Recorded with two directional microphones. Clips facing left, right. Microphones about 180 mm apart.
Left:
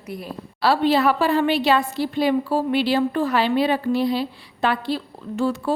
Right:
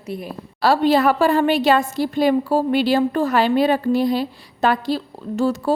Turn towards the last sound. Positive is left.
turn(degrees=-40)  # may be behind; listen again after turning